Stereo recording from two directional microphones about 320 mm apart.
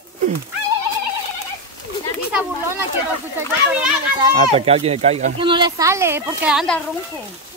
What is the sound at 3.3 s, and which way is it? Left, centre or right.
A child's voice, centre.